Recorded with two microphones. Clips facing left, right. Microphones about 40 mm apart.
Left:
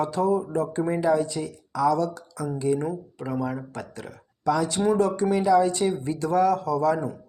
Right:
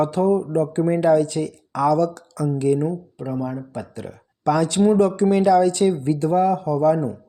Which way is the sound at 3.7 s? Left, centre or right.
Right.